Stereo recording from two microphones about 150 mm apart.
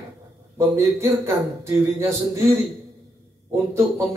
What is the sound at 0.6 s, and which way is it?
A man's voice, 15° right (ahead or behind).